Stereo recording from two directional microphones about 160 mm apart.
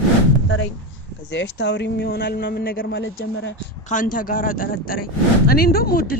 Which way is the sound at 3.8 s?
55° left (ahead or behind).